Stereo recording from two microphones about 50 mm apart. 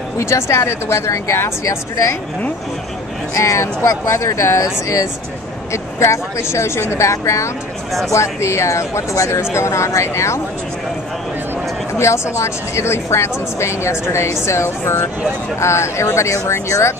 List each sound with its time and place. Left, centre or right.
0.2 s a woman's voice: left
3.3 s speech: left
5.7 s a woman's voice: left
11.9 s a woman's voice: left